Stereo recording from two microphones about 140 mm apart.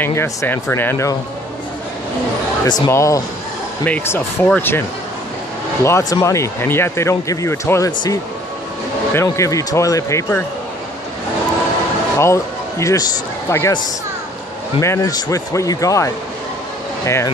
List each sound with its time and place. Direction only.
0.0 s speech: 20° left (ahead or behind)
2.6 s speech: 30° left (ahead or behind)
5.9 s speech: 20° left (ahead or behind)
9.1 s speech: 20° left (ahead or behind)
12.2 s a man's voice: 20° left (ahead or behind)
14.8 s speech: 20° left (ahead or behind)